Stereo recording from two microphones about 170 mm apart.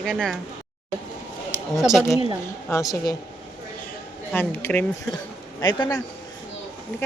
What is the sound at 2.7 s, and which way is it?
Speech, 20° left (ahead or behind).